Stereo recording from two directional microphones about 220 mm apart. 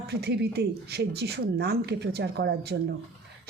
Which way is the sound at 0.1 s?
50° right (ahead or behind).